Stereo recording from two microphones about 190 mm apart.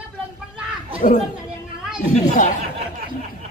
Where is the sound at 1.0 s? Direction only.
45° left (ahead or behind).